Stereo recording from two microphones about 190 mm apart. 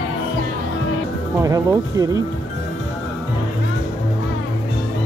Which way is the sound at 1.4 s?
20° right (ahead or behind).